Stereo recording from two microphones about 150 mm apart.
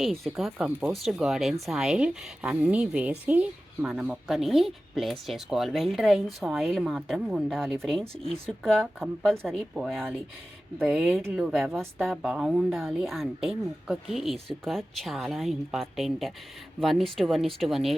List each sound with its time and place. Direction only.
0.0 s speech: centre (ahead or behind)